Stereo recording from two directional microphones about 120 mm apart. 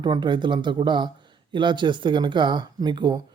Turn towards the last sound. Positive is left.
turn(degrees=-35)  # may be behind; listen again after turning